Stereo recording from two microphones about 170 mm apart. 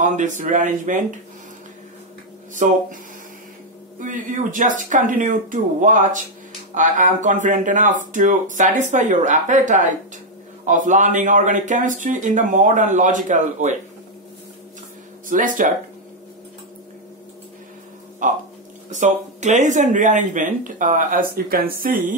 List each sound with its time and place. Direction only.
0.0 s speech: 45° right (ahead or behind)
2.5 s speech: 50° right (ahead or behind)
4.0 s speech: 50° right (ahead or behind)
15.2 s speech: 50° right (ahead or behind)
18.2 s speech: 50° right (ahead or behind)